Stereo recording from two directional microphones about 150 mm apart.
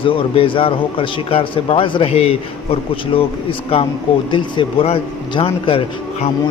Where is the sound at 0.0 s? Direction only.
35° left (ahead or behind).